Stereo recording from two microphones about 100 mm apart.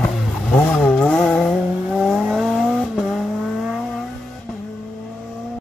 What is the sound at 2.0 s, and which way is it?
Vehicle, 5° right (ahead or behind).